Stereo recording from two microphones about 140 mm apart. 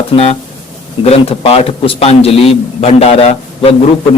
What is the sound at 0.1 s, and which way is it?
A man's voice, 40° left (ahead or behind).